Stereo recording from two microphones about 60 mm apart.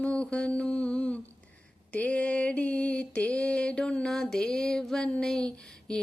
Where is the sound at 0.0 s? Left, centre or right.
Centre.